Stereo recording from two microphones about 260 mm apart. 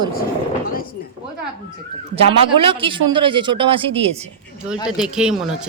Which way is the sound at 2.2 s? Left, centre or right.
Right.